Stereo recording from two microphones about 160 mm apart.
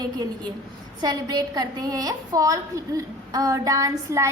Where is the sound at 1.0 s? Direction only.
25° right (ahead or behind).